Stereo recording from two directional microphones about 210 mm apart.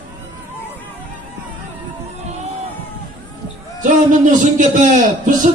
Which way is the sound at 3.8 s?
35° right (ahead or behind).